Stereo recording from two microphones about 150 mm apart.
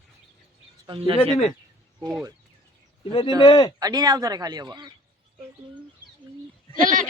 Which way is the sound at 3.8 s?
25° right (ahead or behind).